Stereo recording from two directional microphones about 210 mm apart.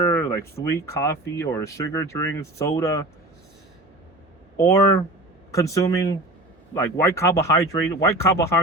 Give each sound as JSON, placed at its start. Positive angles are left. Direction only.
{"t": 0.1, "sound": "speech", "side_deg": 10}
{"t": 4.5, "sound": "speech", "side_deg": 15}